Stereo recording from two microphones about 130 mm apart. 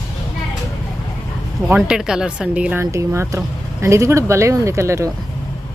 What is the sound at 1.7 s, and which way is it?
Speech, 5° right (ahead or behind).